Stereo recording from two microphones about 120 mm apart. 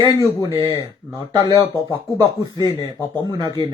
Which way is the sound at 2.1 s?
35° right (ahead or behind).